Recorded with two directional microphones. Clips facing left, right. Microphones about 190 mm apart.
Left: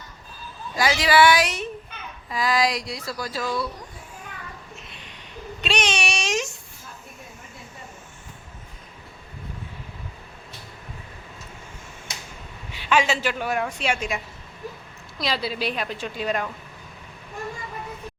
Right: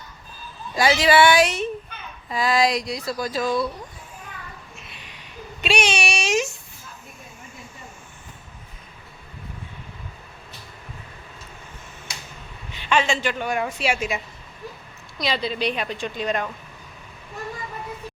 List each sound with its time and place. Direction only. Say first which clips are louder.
0.8 s speech: right 2 dB; 25° right (ahead or behind)
5.6 s speech: right 3 dB; 10° right (ahead or behind)
12.7 s a woman's voice: even; 10° left (ahead or behind); by 14.2 s 5° right (ahead or behind)
15.2 s a woman's voice: right 2 dB; 5° left (ahead or behind)